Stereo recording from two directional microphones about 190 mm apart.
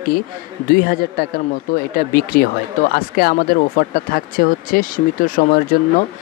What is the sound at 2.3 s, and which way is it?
Speech, 55° left (ahead or behind).